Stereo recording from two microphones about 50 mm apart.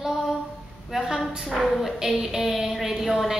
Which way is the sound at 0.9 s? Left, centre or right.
Centre.